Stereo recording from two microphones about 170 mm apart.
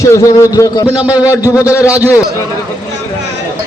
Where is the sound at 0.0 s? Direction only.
20° left (ahead or behind).